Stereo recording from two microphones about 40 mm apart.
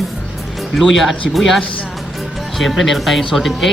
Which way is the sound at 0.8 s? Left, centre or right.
Centre.